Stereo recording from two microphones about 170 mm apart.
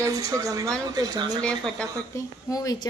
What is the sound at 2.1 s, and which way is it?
Speech, 20° left (ahead or behind).